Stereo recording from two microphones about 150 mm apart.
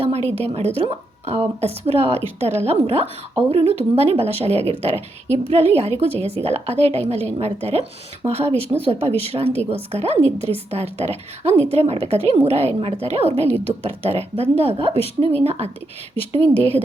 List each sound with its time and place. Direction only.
0.0 s a woman's voice: 40° right (ahead or behind)